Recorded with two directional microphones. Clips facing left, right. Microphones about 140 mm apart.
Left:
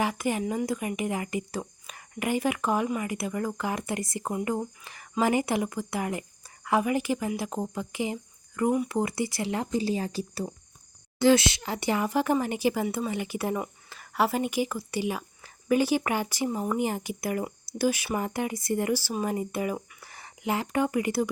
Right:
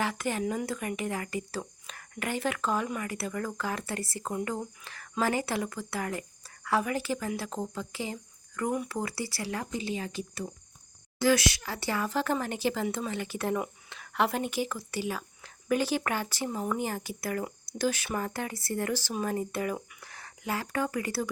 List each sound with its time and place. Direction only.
0.0 s speech: 15° left (ahead or behind)
8.9 s speech: 20° left (ahead or behind)
9.7 s speech: 35° left (ahead or behind)
11.2 s speech: 25° left (ahead or behind)